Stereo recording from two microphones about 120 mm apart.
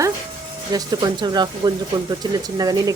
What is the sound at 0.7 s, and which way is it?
Speech, 35° right (ahead or behind).